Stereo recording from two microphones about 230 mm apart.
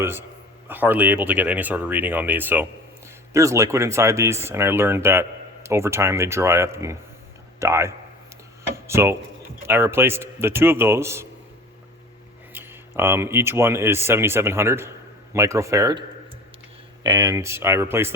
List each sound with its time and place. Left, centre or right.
0.0 s speech: centre
12.5 s a sound: centre
13.0 s speech: centre